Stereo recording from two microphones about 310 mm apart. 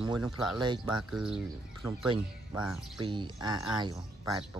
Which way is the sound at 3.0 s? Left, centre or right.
Centre.